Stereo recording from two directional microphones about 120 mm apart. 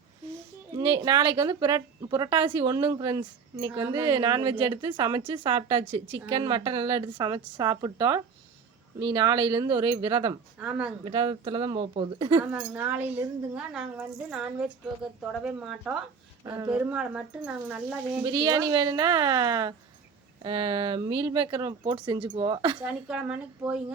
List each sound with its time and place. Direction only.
0.8 s a woman's voice: 45° right (ahead or behind)
6.1 s a woman's voice: 20° right (ahead or behind)
6.3 s a woman's voice: 40° right (ahead or behind)
10.6 s speech: 10° right (ahead or behind)
11.0 s speech: 45° right (ahead or behind)
12.4 s speech: 15° right (ahead or behind)
13.6 s speech: 5° right (ahead or behind)
16.4 s speech: 35° right (ahead or behind)
16.6 s speech: 10° right (ahead or behind)
18.2 s a woman's voice: 35° right (ahead or behind)
20.4 s a woman's voice: 45° right (ahead or behind)
22.8 s speech: 10° right (ahead or behind)